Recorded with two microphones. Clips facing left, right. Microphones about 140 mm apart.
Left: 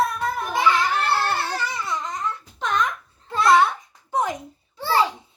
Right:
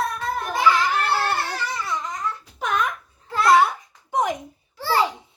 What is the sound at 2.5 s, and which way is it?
Babbling, 10° right (ahead or behind).